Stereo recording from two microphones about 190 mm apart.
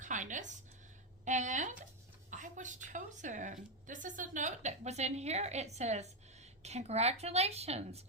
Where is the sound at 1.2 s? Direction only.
40° right (ahead or behind).